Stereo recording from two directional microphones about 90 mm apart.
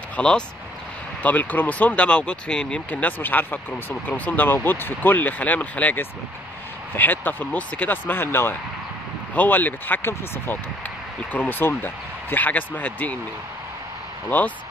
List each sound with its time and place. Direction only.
0.1 s vehicle: 10° left (ahead or behind)
1.2 s speech: 20° left (ahead or behind)